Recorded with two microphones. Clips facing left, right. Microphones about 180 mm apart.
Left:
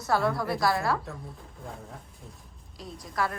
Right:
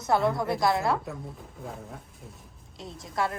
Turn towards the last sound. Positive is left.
turn(degrees=-25)  # may be behind; listen again after turning